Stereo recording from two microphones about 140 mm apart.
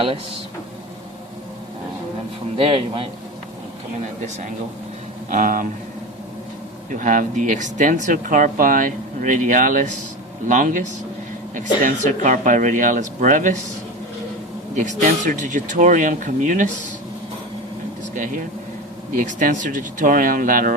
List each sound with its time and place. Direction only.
2.6 s speech: 40° right (ahead or behind)
5.3 s speech: 70° right (ahead or behind)
6.9 s speech: 70° right (ahead or behind)
14.8 s speech: 65° right (ahead or behind)
18.1 s speech: 70° right (ahead or behind)